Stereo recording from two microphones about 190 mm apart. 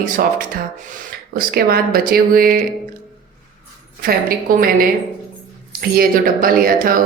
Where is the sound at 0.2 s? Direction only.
50° right (ahead or behind).